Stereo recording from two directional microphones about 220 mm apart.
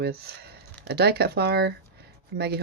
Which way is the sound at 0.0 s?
45° right (ahead or behind).